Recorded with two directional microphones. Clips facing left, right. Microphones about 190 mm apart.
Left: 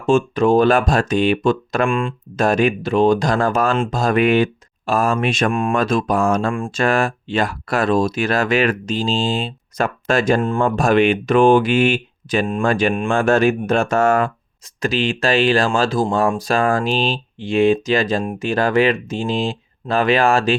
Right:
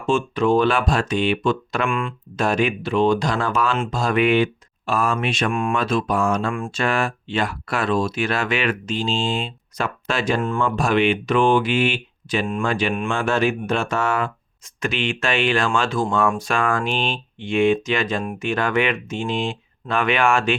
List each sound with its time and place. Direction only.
0.1 s speech: 45° left (ahead or behind)
1.9 s speech: 30° left (ahead or behind)
2.3 s speech: 45° left (ahead or behind)
14.8 s speech: 35° left (ahead or behind)